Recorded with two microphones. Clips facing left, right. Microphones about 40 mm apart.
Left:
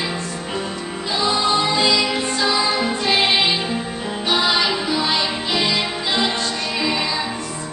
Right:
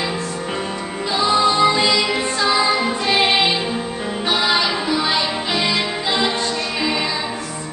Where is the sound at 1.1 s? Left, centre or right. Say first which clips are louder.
Right 3 dB; right.